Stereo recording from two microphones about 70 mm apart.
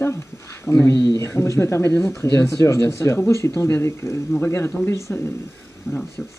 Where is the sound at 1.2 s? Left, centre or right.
Left.